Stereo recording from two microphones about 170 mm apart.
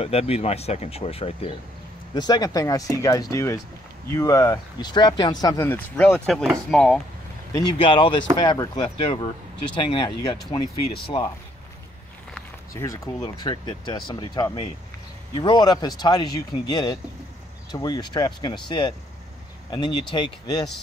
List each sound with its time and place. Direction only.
0.0 s speech: 35° left (ahead or behind)
2.1 s speech: 25° left (ahead or behind); by 7.0 s 5° left (ahead or behind)
7.5 s speech: 25° left (ahead or behind)
12.7 s speech: 20° left (ahead or behind)